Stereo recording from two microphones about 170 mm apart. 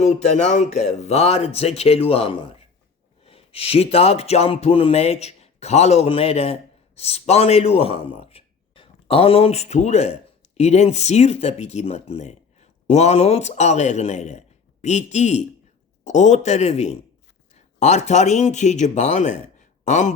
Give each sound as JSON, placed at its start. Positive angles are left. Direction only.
{"t": 0.0, "sound": "speech", "side_deg": 40}